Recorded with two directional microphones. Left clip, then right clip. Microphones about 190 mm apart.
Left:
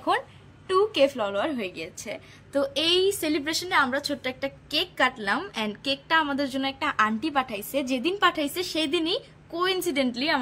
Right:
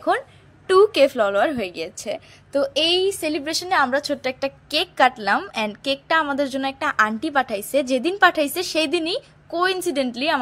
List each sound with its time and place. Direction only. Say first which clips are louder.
0.7 s a woman's voice: right 7 dB; 35° right (ahead or behind)